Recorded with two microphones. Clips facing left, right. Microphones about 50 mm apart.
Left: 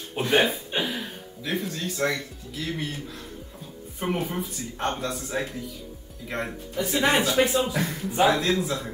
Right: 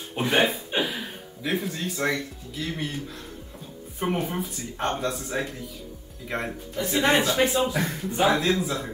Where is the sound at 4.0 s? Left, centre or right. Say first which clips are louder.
Right 1 dB; centre.